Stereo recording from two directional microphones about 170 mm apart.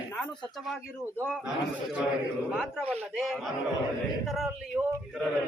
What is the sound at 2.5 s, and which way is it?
A man's voice, 5° right (ahead or behind).